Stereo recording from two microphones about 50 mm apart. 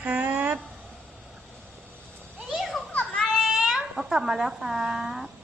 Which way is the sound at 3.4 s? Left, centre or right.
Centre.